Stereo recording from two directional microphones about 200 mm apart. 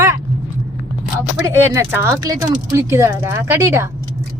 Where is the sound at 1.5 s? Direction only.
10° right (ahead or behind).